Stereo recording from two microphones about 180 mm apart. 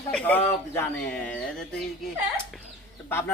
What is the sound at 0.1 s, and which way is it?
Speech, 10° left (ahead or behind).